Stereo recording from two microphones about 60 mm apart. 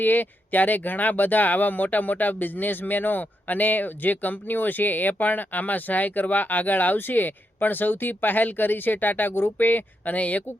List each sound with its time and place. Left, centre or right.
0.0 s speech: left